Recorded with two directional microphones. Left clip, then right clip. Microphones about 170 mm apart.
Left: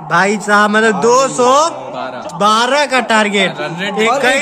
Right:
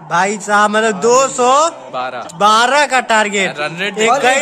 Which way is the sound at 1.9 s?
35° right (ahead or behind).